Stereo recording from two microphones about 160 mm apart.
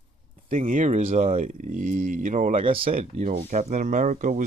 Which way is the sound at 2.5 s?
35° right (ahead or behind).